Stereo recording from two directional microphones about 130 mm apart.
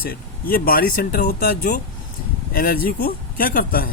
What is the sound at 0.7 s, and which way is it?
Speech, 90° left.